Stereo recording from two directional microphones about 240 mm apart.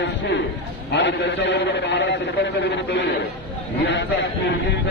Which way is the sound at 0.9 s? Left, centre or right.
Left.